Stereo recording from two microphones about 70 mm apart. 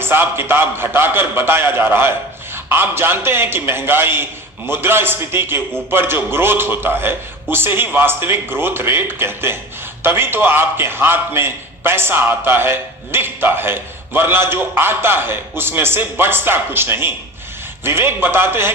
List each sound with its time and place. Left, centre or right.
0.0 s a man's voice: right